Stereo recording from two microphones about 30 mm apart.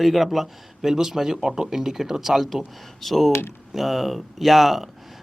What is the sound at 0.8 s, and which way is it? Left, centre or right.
Speech, centre.